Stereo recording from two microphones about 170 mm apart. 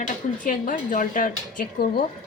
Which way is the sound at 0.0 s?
50° left (ahead or behind).